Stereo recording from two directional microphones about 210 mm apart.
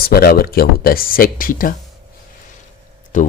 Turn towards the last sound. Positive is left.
turn(degrees=40)  # may be behind; listen again after turning